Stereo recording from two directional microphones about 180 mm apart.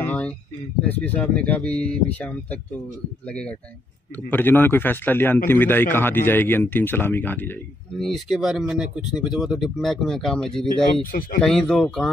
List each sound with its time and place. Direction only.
0.0 s a sound: 10° left (ahead or behind)
0.8 s speech: 10° left (ahead or behind)
11.1 s speech: 50° left (ahead or behind)
11.4 s speech: 5° left (ahead or behind)